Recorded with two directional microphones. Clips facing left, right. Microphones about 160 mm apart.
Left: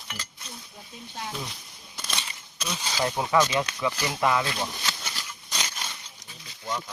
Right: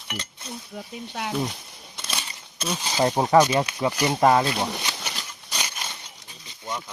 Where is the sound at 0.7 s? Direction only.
75° right (ahead or behind).